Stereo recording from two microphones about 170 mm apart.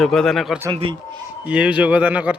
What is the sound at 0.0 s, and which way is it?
Speech, centre (ahead or behind).